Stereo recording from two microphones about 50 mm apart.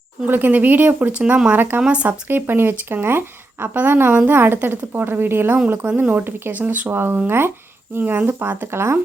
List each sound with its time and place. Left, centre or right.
0.3 s speech: right
1.8 s speech: right
2.2 s speech: right
5.8 s speech: right
6.9 s speech: right
7.9 s speech: right
8.3 s speech: right